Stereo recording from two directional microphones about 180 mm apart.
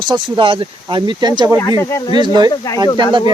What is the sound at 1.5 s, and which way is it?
Speech, 15° left (ahead or behind).